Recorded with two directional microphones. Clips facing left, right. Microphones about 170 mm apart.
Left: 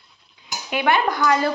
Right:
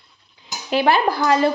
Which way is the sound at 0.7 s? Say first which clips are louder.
Right 3 dB; 30° right (ahead or behind).